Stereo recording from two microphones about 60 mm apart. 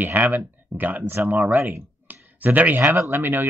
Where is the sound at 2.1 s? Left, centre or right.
Right.